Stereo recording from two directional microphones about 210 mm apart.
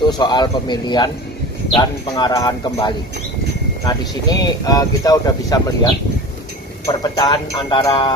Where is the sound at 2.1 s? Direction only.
20° left (ahead or behind).